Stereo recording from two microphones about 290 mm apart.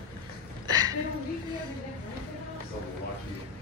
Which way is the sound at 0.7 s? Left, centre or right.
Centre.